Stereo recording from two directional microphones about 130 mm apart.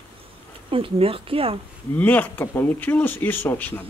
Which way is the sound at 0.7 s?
45° right (ahead or behind).